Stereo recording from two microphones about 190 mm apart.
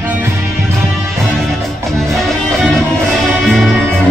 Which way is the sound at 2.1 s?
Centre (ahead or behind).